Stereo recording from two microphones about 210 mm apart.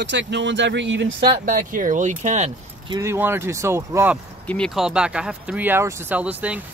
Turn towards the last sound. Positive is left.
turn(degrees=-10)  # may be behind; listen again after turning